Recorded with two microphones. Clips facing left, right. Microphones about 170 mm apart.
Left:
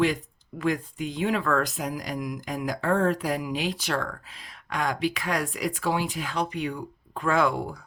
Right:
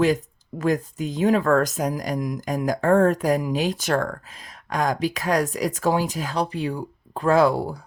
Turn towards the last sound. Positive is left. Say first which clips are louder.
# right 6 dB
turn(degrees=-35)  # may be behind; listen again after turning